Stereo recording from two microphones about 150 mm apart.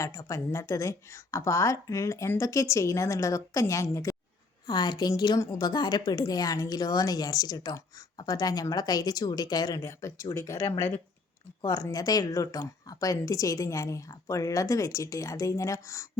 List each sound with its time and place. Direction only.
0.0 s speech: 20° left (ahead or behind)